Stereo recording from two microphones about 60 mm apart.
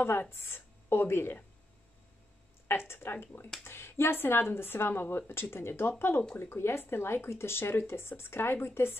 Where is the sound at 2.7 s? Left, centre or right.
Left.